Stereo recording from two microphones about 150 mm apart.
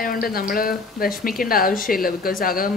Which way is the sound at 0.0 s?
75° left (ahead or behind).